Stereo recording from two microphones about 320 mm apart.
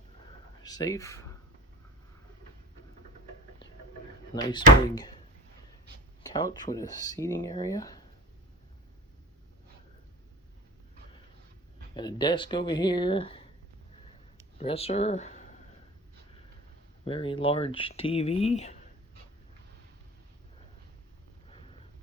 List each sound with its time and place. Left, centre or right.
0.6 s speech: centre
4.4 s speech: centre
6.7 s speech: centre
11.9 s speech: centre
14.6 s speech: centre
17.1 s speech: centre
21.5 s a sound: centre